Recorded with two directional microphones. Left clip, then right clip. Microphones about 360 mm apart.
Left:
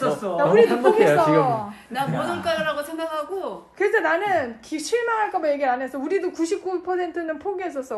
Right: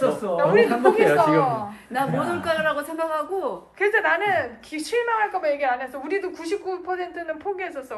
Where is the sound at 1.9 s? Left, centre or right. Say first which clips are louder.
Right 1 dB; centre.